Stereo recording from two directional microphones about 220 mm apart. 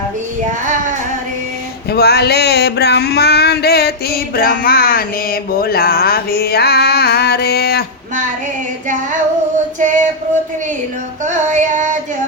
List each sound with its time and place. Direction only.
0.4 s child singing: 35° right (ahead or behind)
1.9 s a sound: 45° left (ahead or behind)
9.8 s music: 35° right (ahead or behind)
11.3 s music: 35° right (ahead or behind)